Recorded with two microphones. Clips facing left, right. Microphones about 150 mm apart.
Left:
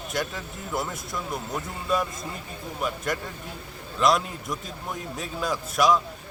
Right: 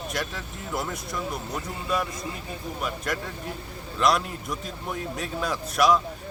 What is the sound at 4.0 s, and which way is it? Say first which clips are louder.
Speech: left 1 dB; centre (ahead or behind).